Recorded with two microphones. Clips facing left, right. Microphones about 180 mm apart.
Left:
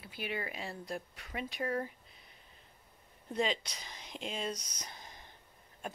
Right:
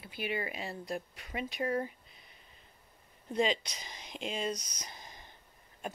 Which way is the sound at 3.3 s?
15° right (ahead or behind).